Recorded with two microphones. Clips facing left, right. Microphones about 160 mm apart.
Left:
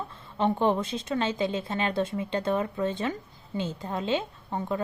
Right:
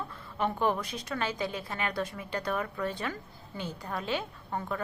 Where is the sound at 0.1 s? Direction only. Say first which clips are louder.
Left 8 dB; 25° left (ahead or behind).